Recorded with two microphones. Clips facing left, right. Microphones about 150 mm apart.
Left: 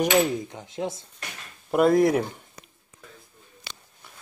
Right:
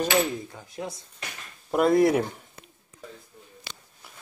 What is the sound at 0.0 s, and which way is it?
Speech, 20° left (ahead or behind).